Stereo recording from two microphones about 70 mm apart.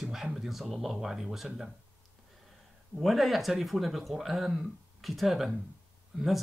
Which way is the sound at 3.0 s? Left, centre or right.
Centre.